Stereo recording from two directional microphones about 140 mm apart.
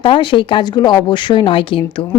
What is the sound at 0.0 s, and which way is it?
A woman's voice, 35° left (ahead or behind).